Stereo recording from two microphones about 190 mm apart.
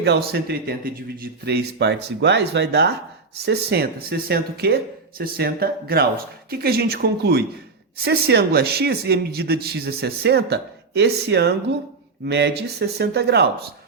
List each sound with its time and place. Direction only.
0.0 s speech: 60° right (ahead or behind)